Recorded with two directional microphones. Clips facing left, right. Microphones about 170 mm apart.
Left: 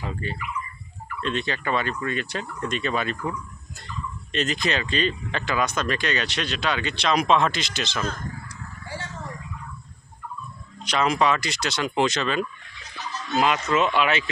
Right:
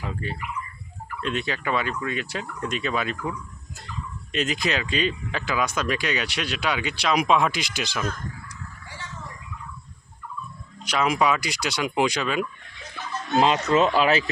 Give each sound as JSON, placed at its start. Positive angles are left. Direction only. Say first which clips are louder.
{"t": 0.0, "sound": "speech", "louder": "even", "side_deg": -5}
{"t": 10.8, "sound": "speech", "louder": "even", "side_deg": -5}
{"t": 12.8, "sound": "a sound", "louder": "right 2 dB", "side_deg": -55}
{"t": 13.7, "sound": "speech", "louder": "right 2 dB", "side_deg": -35}